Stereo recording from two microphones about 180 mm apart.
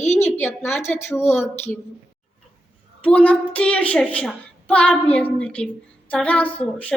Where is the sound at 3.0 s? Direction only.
5° left (ahead or behind).